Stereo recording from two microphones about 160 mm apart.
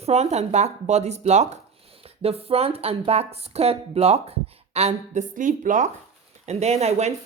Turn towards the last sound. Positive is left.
turn(degrees=-40)  # may be behind; listen again after turning